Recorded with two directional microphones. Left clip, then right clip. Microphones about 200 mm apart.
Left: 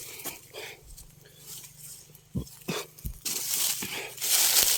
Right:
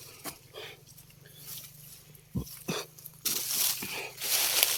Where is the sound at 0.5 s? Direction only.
15° left (ahead or behind).